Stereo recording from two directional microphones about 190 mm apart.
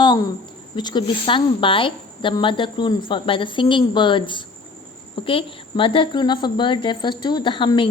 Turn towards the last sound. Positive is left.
turn(degrees=25)  # may be behind; listen again after turning